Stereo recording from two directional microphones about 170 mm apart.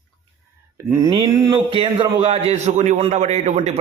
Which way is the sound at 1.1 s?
25° right (ahead or behind).